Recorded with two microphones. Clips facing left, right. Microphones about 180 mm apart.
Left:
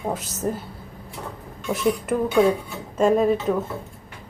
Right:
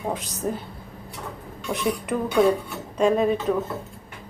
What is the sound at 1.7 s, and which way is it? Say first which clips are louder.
A woman's voice: left 3 dB; 5° left (ahead or behind).